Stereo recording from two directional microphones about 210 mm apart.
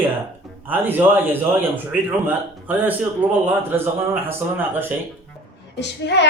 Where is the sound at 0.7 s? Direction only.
10° right (ahead or behind).